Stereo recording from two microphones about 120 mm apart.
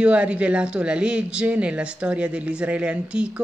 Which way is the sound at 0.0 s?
10° right (ahead or behind).